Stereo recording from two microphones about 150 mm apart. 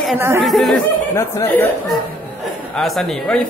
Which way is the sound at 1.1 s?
15° left (ahead or behind).